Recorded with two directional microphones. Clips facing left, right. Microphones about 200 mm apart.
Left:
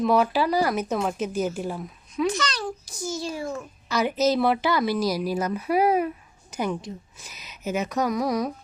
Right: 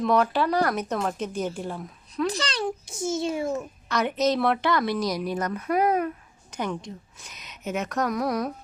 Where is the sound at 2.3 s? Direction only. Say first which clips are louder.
Right 1 dB; 30° right (ahead or behind).